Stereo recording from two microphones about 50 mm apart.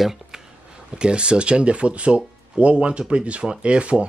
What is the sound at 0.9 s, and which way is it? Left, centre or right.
Speech, centre.